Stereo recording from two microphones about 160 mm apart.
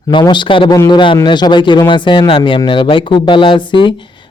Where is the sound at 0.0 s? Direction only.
30° left (ahead or behind).